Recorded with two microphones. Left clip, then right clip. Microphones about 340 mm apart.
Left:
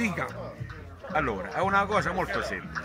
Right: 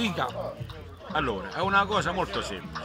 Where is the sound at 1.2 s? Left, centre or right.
Centre.